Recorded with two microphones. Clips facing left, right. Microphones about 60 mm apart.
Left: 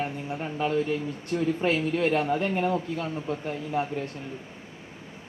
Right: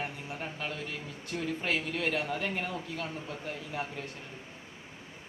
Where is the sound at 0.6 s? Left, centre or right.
Left.